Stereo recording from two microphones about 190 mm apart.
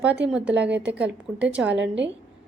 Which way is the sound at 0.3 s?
5° right (ahead or behind).